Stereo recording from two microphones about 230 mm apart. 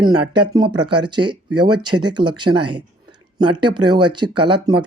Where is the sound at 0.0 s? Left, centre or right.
Centre.